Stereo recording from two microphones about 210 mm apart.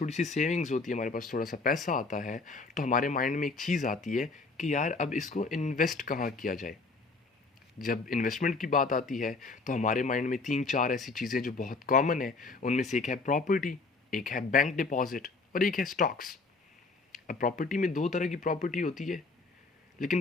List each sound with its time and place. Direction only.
0.0 s speech: 35° left (ahead or behind)
7.9 s speech: 40° left (ahead or behind)
11.0 s speech: centre (ahead or behind)
11.3 s speech: 40° left (ahead or behind)
17.2 s speech: 40° left (ahead or behind)